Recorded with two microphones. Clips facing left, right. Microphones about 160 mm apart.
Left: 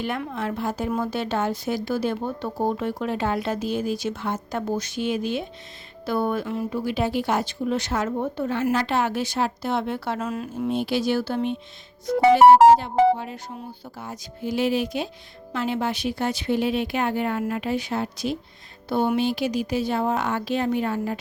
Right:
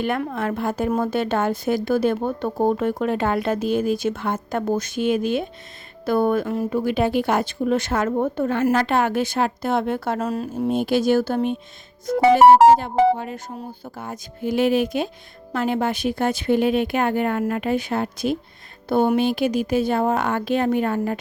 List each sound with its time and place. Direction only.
0.0 s a woman's voice: 55° right (ahead or behind)